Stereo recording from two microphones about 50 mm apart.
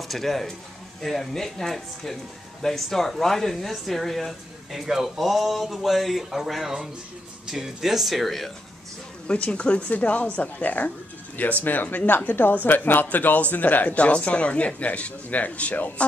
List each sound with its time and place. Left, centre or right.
0.1 s speech: centre
4.8 s speech: centre
9.3 s speech: left